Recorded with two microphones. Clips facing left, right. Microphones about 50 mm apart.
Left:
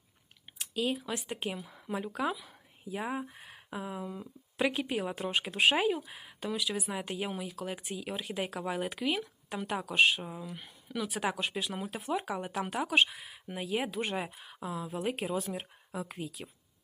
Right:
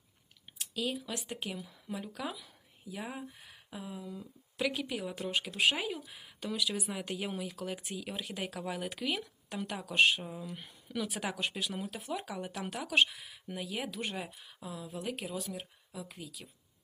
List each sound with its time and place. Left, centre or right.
0.6 s a sound: centre
1.0 s speech: centre
9.9 s speech: centre
12.0 s speech: left